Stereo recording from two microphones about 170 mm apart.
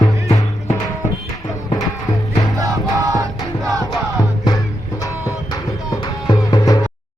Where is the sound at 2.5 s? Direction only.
20° right (ahead or behind).